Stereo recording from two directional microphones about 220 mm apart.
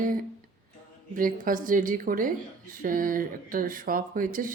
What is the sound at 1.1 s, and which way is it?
Speech, 40° right (ahead or behind).